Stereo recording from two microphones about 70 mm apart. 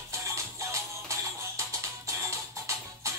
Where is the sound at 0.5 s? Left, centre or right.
Right.